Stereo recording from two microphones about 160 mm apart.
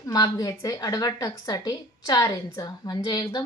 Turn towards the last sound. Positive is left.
turn(degrees=25)  # may be behind; listen again after turning